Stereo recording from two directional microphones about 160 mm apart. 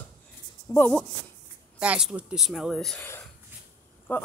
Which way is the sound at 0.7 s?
15° left (ahead or behind).